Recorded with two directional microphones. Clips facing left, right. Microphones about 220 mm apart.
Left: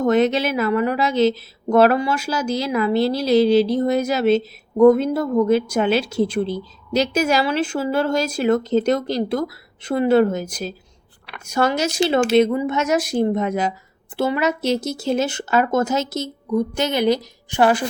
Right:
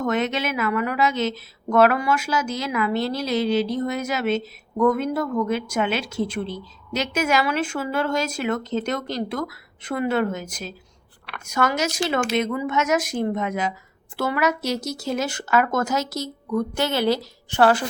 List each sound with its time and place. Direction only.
0.0 s speech: 35° left (ahead or behind); by 17.8 s 15° left (ahead or behind)